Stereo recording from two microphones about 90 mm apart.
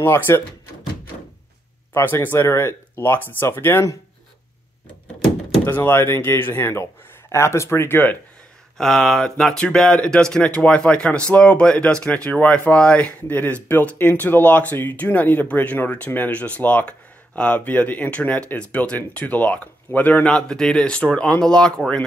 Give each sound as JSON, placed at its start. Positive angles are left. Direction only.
{"t": 0.0, "sound": "a man's voice", "side_deg": 30}
{"t": 2.0, "sound": "a man's voice", "side_deg": 25}
{"t": 5.7, "sound": "a man's voice", "side_deg": 25}
{"t": 8.7, "sound": "speech", "side_deg": 5}
{"t": 20.2, "sound": "speech", "side_deg": 10}